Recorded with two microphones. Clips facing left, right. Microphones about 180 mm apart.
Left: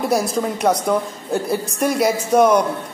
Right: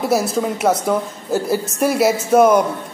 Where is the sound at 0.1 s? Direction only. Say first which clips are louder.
Right 1 dB; 5° right (ahead or behind).